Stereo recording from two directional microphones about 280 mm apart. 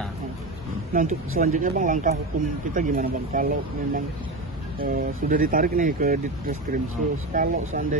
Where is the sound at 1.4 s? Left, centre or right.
Right.